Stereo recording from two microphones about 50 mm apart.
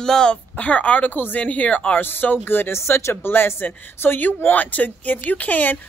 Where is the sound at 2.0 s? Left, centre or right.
Left.